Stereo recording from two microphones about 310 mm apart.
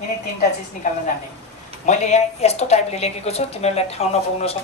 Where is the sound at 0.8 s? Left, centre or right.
Left.